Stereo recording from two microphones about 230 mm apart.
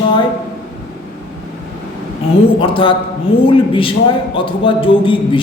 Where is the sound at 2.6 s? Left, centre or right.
Left.